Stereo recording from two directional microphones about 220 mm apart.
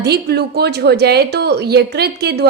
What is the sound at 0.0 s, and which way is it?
A woman's voice, 50° right (ahead or behind).